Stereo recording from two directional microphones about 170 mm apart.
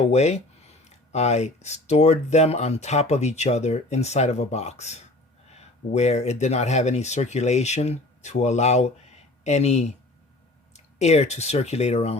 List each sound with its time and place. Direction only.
0.0 s speech: 40° left (ahead or behind)